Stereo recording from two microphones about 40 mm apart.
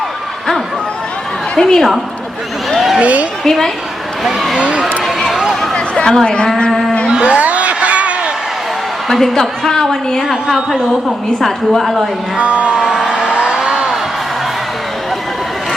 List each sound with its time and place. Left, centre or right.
1.5 s a woman's voice: centre
3.0 s speech: right
3.4 s a woman's voice: centre
4.2 s speech: centre
5.0 s run: centre
5.7 s chatter: left
6.2 s speech: left
7.1 s a sound: right
9.0 s a woman's voice: centre
10.2 s a woman's voice: centre
11.3 s a woman's voice: centre
12.4 s speech: right
12.7 s a woman's voice: centre
13.1 s vehicle: right